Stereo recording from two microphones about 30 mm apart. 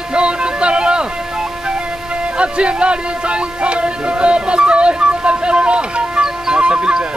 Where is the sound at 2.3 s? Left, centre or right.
Right.